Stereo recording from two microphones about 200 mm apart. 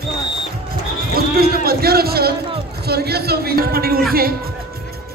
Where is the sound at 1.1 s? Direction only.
50° right (ahead or behind).